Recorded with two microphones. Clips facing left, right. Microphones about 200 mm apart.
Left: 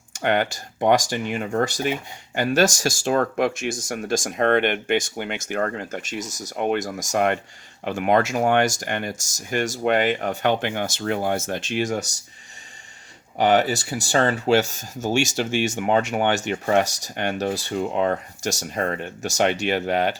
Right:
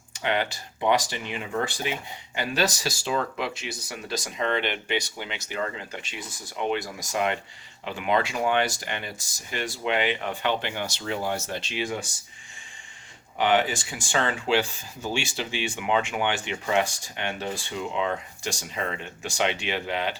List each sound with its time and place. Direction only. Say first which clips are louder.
0.1 s speech: left 5 dB; 50° left (ahead or behind)
13.4 s speech: left 4 dB; 40° left (ahead or behind)